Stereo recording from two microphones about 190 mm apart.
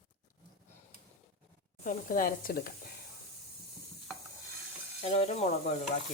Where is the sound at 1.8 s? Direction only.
45° left (ahead or behind).